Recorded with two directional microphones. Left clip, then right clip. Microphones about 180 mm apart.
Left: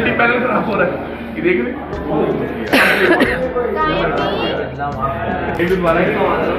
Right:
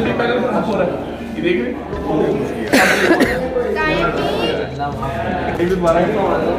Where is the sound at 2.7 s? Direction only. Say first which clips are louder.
Left 1 dB; 30° right (ahead or behind).